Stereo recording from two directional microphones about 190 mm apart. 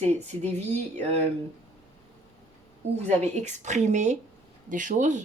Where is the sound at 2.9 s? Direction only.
35° right (ahead or behind).